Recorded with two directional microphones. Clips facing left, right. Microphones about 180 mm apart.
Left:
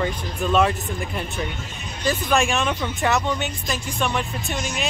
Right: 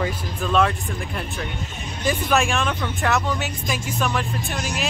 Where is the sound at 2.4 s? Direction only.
Centre (ahead or behind).